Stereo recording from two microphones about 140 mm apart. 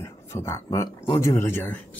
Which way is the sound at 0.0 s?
20° left (ahead or behind).